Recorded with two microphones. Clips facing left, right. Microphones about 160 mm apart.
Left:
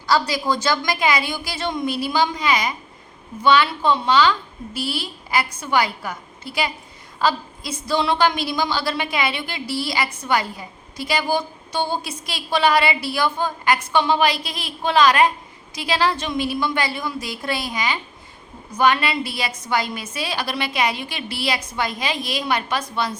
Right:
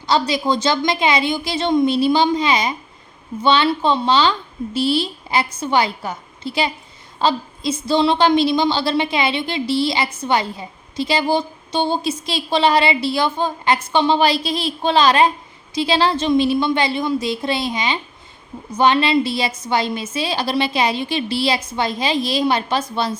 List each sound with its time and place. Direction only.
0.0 s a woman's voice: 20° right (ahead or behind)